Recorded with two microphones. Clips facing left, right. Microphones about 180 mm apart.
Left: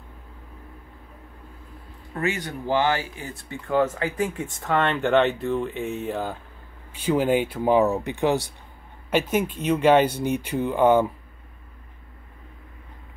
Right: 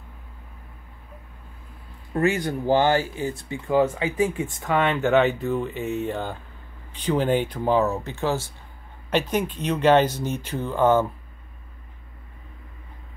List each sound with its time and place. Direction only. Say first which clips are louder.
2.1 s speech: right 5 dB; 35° right (ahead or behind)
3.4 s speech: right 1 dB; 10° right (ahead or behind); by 11.1 s 15° left (ahead or behind)